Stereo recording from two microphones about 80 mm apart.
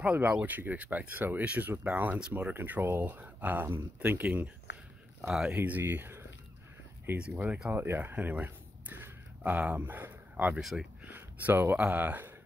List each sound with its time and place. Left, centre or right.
0.0 s speech: centre
5.2 s speech: centre
5.5 s speech: right
7.2 s speech: centre
7.7 s speech: right
10.6 s speech: centre
11.1 s speech: right